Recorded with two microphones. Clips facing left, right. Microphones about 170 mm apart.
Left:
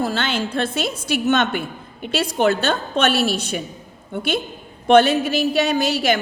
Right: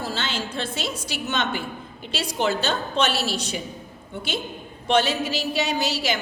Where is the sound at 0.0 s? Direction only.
55° left (ahead or behind).